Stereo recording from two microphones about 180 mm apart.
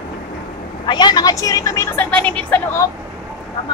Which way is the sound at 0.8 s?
25° left (ahead or behind).